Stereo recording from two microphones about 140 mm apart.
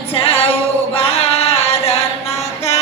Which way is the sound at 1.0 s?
45° left (ahead or behind).